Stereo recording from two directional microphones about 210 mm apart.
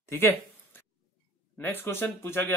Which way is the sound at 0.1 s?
10° left (ahead or behind).